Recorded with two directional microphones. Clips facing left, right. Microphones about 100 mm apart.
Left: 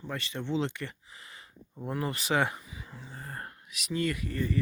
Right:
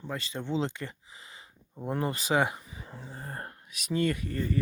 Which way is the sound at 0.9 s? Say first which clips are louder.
Even; 25° right (ahead or behind).